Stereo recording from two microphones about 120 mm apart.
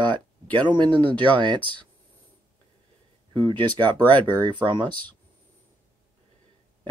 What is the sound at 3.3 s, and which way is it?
Speech, 45° right (ahead or behind).